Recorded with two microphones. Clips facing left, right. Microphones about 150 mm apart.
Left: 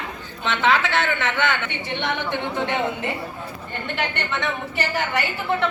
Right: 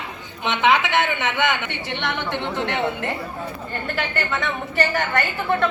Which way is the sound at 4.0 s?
Centre (ahead or behind).